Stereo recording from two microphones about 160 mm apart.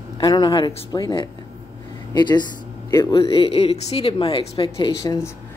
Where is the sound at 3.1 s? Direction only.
35° left (ahead or behind).